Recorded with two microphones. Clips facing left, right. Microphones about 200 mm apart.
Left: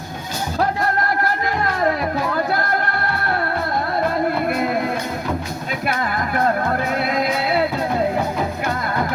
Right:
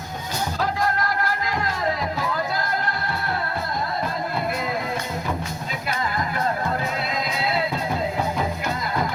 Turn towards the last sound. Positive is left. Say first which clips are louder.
# left 6 dB
turn(degrees=60)  # may be behind; listen again after turning